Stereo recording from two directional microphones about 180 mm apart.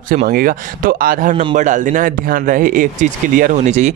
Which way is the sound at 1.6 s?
45° right (ahead or behind).